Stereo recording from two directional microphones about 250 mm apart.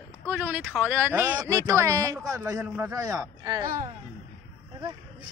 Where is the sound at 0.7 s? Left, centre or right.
Centre.